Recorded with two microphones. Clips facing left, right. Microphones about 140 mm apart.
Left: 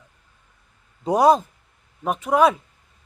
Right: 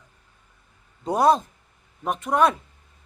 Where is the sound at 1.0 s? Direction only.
10° left (ahead or behind).